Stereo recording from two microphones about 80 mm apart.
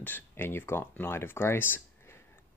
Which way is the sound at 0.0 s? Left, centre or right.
Left.